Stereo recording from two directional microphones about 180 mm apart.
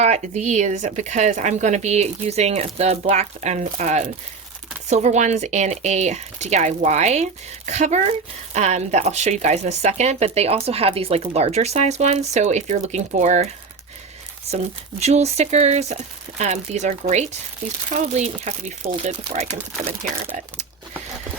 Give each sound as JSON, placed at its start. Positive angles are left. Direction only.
{"t": 0.0, "sound": "speech", "side_deg": -40}
{"t": 14.5, "sound": "speech", "side_deg": -35}